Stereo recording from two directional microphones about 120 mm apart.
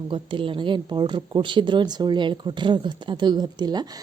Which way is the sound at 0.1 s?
45° right (ahead or behind).